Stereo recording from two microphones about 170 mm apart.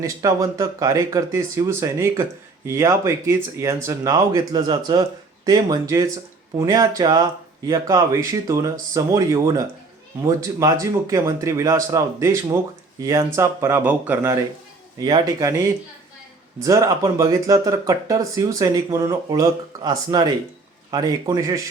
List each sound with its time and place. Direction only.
0.0 s speech: 20° right (ahead or behind)